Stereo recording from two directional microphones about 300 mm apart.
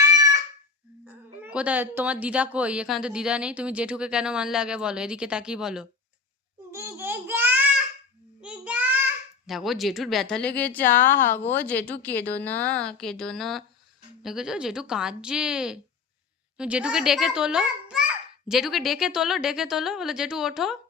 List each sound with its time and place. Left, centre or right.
1.0 s speech: centre
6.7 s child singing: centre
9.5 s speech: centre